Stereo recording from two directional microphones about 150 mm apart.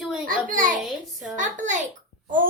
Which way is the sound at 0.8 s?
Centre (ahead or behind).